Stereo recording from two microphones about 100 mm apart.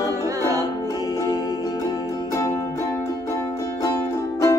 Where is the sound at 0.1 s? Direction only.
35° right (ahead or behind).